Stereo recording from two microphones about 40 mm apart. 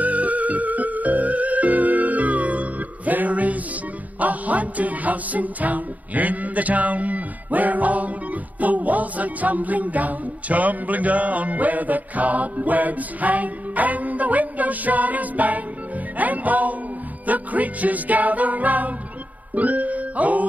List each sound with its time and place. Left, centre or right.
0.0 s music: right